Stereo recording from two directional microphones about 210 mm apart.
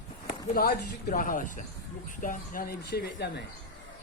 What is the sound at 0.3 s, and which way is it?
Speech, 40° left (ahead or behind).